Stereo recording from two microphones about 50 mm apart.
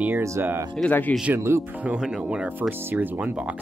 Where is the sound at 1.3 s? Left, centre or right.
Right.